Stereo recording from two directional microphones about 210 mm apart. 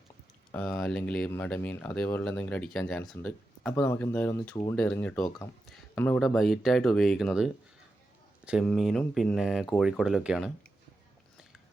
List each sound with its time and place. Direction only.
0.5 s speech: 5° left (ahead or behind)
8.6 s speech: centre (ahead or behind)